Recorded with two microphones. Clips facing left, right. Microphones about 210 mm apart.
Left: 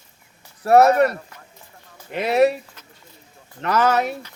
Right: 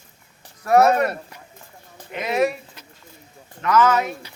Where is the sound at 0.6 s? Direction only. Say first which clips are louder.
Left 2 dB; 30° left (ahead or behind).